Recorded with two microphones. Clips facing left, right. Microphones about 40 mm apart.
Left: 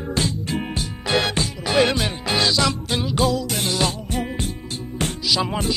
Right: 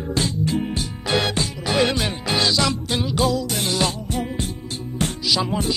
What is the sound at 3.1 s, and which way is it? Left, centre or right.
Music, left.